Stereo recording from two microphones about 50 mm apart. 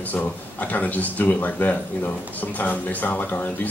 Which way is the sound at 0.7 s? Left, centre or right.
Left.